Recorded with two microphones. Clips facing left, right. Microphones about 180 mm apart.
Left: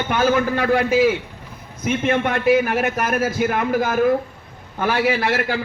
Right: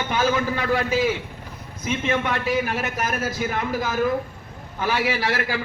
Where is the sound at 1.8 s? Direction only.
55° left (ahead or behind).